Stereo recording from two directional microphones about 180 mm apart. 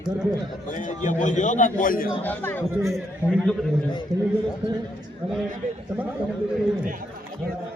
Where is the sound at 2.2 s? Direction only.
10° left (ahead or behind).